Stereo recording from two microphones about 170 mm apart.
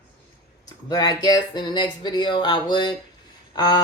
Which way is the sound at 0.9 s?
25° left (ahead or behind).